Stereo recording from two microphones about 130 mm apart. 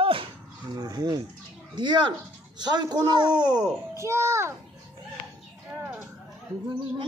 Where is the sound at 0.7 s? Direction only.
30° right (ahead or behind).